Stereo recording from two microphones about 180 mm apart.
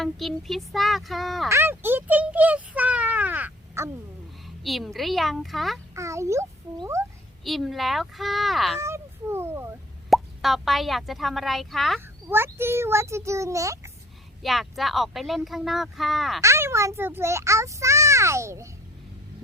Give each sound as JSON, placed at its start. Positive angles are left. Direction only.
{"t": 0.0, "sound": "speech", "side_deg": 0}
{"t": 1.5, "sound": "a sound", "side_deg": -15}
{"t": 4.4, "sound": "speech", "side_deg": 0}
{"t": 5.9, "sound": "a sound", "side_deg": -15}
{"t": 7.4, "sound": "speech", "side_deg": 0}
{"t": 8.8, "sound": "a sound", "side_deg": -15}
{"t": 10.1, "sound": "speech", "side_deg": 0}
{"t": 11.9, "sound": "a child's voice", "side_deg": -10}
{"t": 14.4, "sound": "speech", "side_deg": 0}
{"t": 16.4, "sound": "a child's voice", "side_deg": -15}